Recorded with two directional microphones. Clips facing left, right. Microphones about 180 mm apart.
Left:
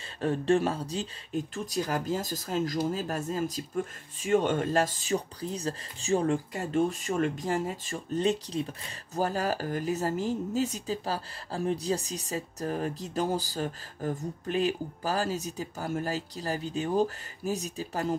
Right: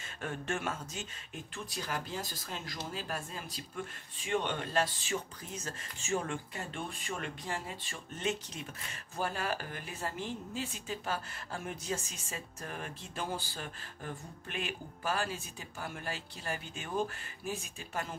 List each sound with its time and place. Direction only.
0.2 s speech: 35° left (ahead or behind)